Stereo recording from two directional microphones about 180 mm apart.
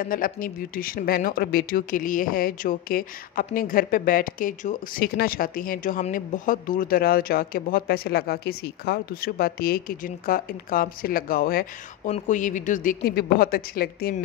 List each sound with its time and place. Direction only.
0.0 s speech: 50° left (ahead or behind)